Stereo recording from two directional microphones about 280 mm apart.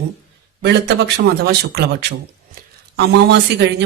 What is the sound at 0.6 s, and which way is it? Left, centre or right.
Speech, right.